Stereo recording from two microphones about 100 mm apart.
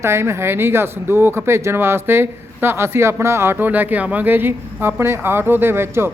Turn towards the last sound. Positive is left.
turn(degrees=-25)  # may be behind; listen again after turning